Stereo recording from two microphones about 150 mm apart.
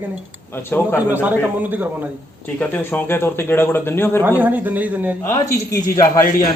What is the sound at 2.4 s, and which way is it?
Speech, 15° left (ahead or behind).